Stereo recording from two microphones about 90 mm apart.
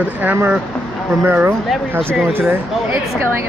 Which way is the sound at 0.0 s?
20° right (ahead or behind).